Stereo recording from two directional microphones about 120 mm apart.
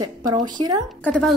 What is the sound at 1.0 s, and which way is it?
Speech, 10° left (ahead or behind).